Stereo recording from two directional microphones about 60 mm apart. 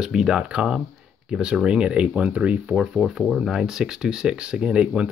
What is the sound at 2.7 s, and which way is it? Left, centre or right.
Speech, centre.